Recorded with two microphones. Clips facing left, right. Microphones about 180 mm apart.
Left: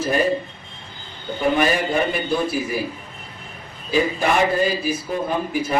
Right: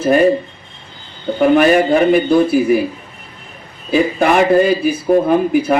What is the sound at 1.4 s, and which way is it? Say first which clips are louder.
Speech: right 9 dB; 60° right (ahead or behind).